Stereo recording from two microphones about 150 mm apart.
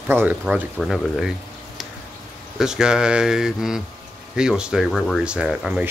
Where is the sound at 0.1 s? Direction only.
10° right (ahead or behind).